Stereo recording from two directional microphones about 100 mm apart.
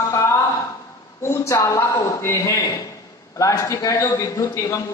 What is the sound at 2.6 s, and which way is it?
A man's voice, 40° left (ahead or behind).